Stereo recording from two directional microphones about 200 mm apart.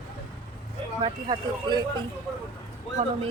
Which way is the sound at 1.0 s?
20° right (ahead or behind).